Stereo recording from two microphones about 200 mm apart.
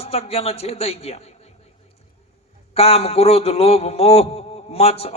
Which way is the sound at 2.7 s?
30° left (ahead or behind).